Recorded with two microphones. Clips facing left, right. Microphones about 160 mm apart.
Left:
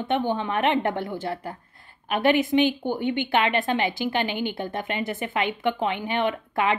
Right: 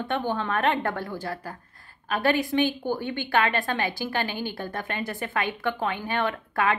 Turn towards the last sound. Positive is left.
turn(degrees=20)  # may be behind; listen again after turning